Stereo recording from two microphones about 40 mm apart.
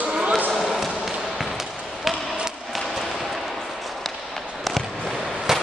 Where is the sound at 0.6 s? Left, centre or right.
Centre.